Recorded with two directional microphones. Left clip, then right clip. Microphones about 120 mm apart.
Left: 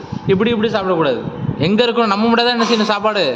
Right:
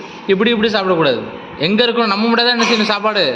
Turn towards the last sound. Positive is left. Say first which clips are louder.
# right 1 dB
turn(degrees=15)  # may be behind; listen again after turning